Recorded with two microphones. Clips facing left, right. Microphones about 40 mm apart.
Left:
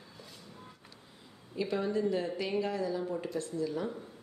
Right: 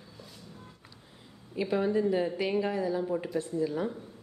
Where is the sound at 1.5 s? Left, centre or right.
Centre.